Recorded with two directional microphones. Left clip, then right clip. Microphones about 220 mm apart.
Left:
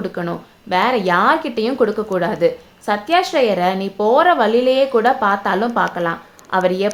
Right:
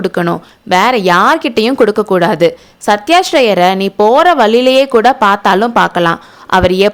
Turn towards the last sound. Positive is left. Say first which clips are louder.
# right 8 dB
turn(degrees=-40)  # may be behind; listen again after turning